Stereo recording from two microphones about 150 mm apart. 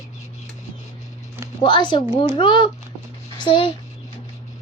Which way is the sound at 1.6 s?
30° left (ahead or behind).